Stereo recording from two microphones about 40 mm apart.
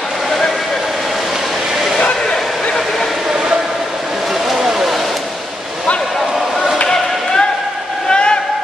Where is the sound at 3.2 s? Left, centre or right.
Centre.